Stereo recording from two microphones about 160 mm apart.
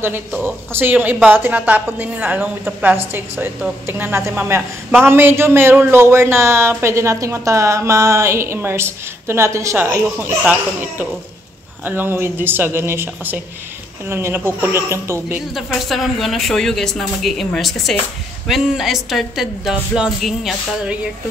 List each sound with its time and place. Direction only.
0.4 s a man's voice: 15° right (ahead or behind)
15.5 s speech: centre (ahead or behind)